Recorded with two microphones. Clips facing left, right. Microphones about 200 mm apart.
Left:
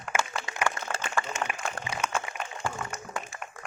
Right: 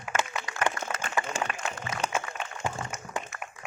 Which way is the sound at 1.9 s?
30° left (ahead or behind).